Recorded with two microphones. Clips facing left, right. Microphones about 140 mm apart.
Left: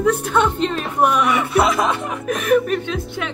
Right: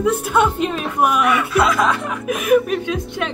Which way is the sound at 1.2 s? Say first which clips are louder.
Even; 30° left (ahead or behind).